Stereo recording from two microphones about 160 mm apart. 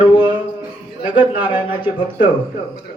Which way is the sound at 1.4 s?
30° left (ahead or behind).